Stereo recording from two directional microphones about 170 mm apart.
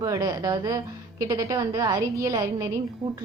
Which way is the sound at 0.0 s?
20° right (ahead or behind).